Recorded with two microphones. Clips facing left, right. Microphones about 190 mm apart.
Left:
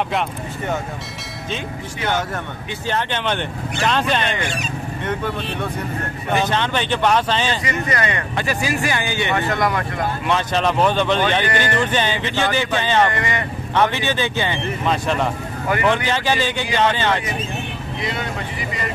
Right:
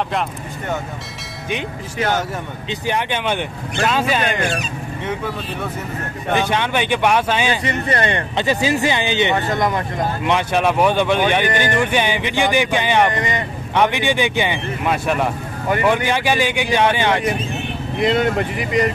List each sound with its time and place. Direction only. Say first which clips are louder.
2.9 s speech: right 1 dB; 10° right (ahead or behind)
6.3 s speech: right 1 dB; 10° right (ahead or behind)
7.6 s speech: right 2 dB; 30° right (ahead or behind); by 17.2 s 15° right (ahead or behind)
17.9 s speech: right 10 dB; 50° right (ahead or behind)